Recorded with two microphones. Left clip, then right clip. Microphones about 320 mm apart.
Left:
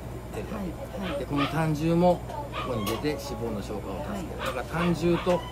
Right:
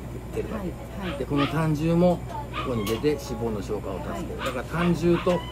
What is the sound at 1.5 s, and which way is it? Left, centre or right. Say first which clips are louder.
A man's voice: right 1 dB; centre.